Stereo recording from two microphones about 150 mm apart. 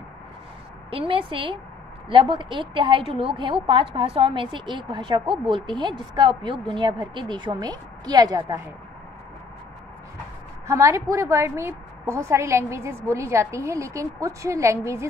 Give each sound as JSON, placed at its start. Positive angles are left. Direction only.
{"t": 0.8, "sound": "a woman's voice", "side_deg": -35}
{"t": 10.7, "sound": "a woman's voice", "side_deg": -20}